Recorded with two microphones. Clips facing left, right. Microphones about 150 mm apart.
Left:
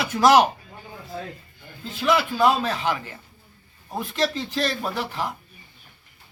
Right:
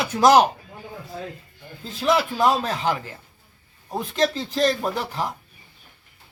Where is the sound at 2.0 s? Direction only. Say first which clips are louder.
Even; 40° right (ahead or behind).